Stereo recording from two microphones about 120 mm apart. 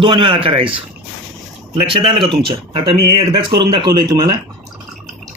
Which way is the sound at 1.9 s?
45° right (ahead or behind).